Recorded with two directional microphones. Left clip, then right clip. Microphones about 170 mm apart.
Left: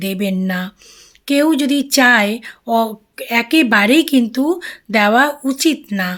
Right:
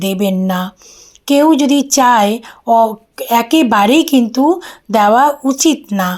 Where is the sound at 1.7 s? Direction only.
40° left (ahead or behind).